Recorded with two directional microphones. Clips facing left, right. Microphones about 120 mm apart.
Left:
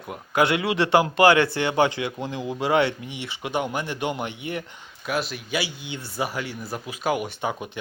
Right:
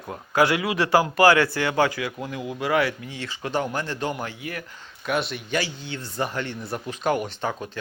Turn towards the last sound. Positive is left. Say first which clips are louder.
# even
turn(degrees=10)  # may be behind; listen again after turning